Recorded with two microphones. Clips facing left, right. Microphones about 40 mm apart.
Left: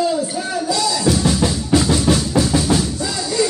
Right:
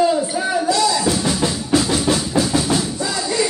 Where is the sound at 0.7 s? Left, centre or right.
Centre.